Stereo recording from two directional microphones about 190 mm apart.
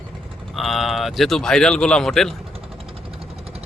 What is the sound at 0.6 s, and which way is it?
Speech, centre (ahead or behind).